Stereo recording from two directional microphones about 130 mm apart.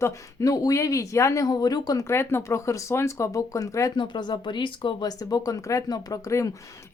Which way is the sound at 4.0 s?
35° left (ahead or behind).